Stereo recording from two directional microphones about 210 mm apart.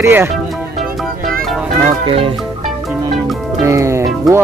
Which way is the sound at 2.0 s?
25° right (ahead or behind).